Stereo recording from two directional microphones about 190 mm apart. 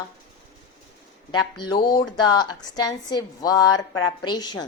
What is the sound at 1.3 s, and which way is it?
Speech, 20° left (ahead or behind).